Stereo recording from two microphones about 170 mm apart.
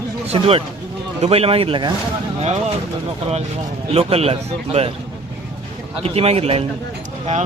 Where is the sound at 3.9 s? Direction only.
35° right (ahead or behind).